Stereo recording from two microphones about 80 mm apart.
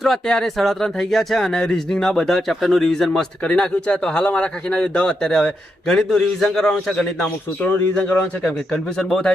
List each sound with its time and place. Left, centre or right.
0.0 s speech: centre
7.6 s speech: left
8.4 s speech: centre